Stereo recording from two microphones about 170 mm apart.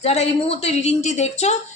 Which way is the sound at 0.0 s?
40° left (ahead or behind).